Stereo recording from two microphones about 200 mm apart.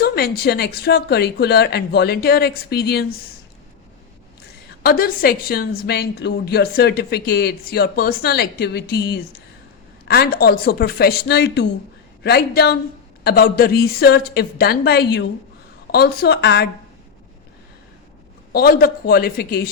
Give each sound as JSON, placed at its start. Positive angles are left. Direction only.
{"t": 0.0, "sound": "a woman's voice", "side_deg": 50}
{"t": 4.8, "sound": "a woman's voice", "side_deg": 50}
{"t": 18.5, "sound": "a woman's voice", "side_deg": 50}